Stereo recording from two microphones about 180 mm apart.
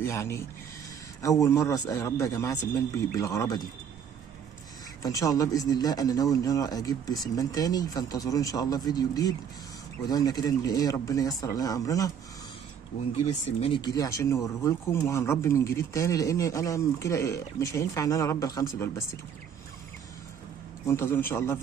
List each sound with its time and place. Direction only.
0.0 s speech: 15° left (ahead or behind)
5.0 s speech: 20° left (ahead or behind)
13.5 s speech: 35° left (ahead or behind)
13.7 s speech: 20° left (ahead or behind)
20.8 s speech: 15° left (ahead or behind)